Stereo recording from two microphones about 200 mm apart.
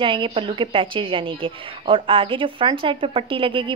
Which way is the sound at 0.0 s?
25° right (ahead or behind).